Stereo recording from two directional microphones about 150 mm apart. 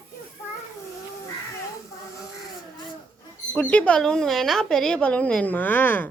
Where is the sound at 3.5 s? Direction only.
10° left (ahead or behind).